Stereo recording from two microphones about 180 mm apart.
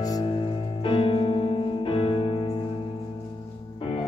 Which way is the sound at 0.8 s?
30° left (ahead or behind).